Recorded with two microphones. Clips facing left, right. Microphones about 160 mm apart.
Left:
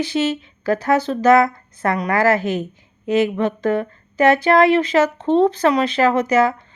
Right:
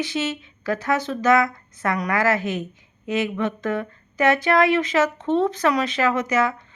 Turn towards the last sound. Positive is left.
turn(degrees=35)  # may be behind; listen again after turning